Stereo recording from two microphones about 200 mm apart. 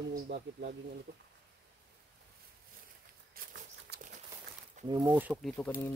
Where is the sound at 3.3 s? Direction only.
45° right (ahead or behind).